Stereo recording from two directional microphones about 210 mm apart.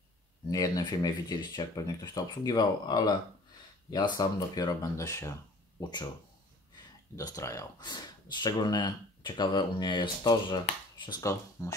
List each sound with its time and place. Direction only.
0.5 s speech: 15° left (ahead or behind)
7.2 s speech: 15° left (ahead or behind)